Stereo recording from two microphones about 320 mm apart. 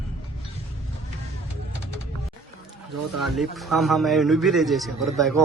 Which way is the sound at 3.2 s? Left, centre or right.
Centre.